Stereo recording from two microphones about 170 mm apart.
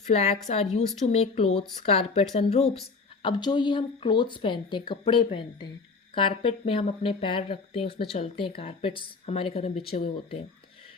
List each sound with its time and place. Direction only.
0.1 s speech: 40° left (ahead or behind)
3.2 s speech: 25° left (ahead or behind)